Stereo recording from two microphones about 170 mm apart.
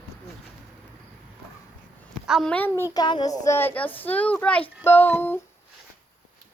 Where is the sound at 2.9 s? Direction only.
25° left (ahead or behind).